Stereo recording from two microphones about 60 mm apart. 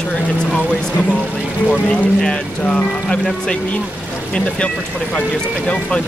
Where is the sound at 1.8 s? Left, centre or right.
Centre.